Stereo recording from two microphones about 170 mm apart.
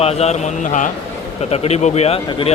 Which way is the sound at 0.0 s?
35° left (ahead or behind).